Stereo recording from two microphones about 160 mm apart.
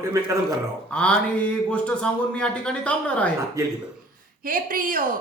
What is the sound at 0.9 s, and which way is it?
Speech, 5° left (ahead or behind).